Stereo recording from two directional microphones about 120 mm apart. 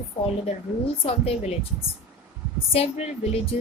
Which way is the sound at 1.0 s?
55° left (ahead or behind).